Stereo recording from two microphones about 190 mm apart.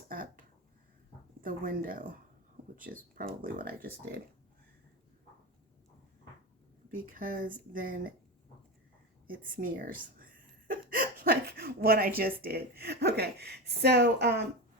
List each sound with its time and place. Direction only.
0.1 s a sound: 45° right (ahead or behind)
1.4 s speech: 45° right (ahead or behind)
6.9 s speech: 45° right (ahead or behind)
9.2 s speech: 45° right (ahead or behind)